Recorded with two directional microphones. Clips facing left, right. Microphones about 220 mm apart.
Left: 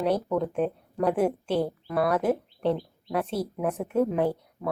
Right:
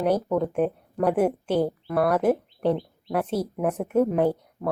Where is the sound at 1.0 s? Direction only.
5° right (ahead or behind).